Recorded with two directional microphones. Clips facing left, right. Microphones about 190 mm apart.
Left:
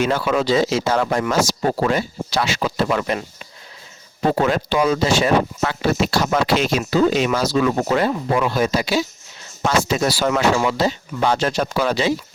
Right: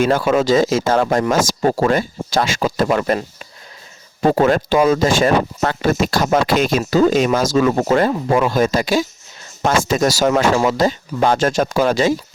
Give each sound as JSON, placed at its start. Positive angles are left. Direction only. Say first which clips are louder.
{"t": 0.0, "sound": "speech", "louder": "right 4 dB", "side_deg": -45}
{"t": 4.2, "sound": "speech", "louder": "right 4 dB", "side_deg": -45}